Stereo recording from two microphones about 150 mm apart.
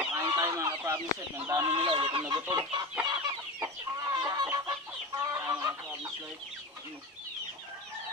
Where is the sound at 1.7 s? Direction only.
35° right (ahead or behind); by 6.1 s 20° right (ahead or behind).